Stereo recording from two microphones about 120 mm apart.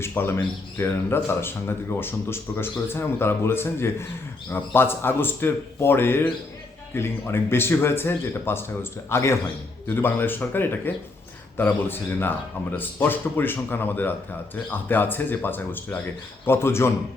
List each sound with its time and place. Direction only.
0.0 s speech: 20° left (ahead or behind)